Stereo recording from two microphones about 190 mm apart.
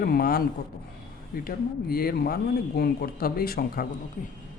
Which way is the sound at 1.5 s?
50° left (ahead or behind).